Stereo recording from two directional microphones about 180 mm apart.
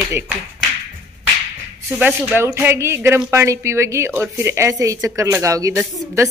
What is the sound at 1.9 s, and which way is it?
Speech, 10° right (ahead or behind).